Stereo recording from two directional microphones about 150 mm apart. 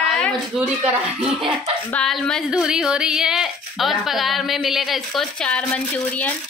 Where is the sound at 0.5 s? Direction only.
Centre (ahead or behind).